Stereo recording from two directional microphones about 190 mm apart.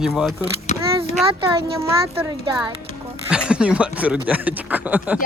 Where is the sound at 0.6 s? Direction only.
35° left (ahead or behind).